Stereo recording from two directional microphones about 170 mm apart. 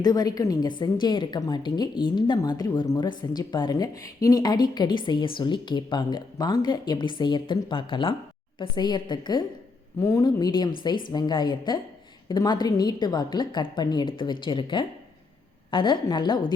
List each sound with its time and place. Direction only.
0.0 s a woman's voice: 25° left (ahead or behind)